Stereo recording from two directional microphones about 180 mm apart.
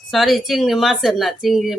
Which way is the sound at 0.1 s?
Centre (ahead or behind).